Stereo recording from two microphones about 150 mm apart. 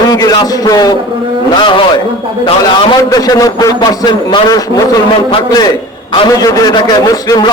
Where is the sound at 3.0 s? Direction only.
25° left (ahead or behind).